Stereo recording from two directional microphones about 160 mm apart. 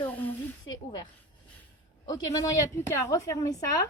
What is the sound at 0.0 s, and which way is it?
Snake, 10° left (ahead or behind).